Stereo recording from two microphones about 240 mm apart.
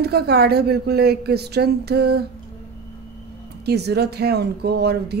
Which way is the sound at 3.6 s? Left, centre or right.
Right.